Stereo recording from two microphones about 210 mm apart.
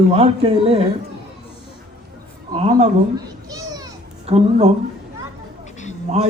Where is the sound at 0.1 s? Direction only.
30° right (ahead or behind).